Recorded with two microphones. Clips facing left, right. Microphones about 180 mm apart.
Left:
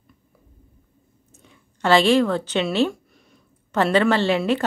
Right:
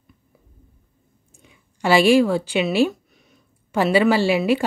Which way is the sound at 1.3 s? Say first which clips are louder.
Left 1 dB; 10° right (ahead or behind).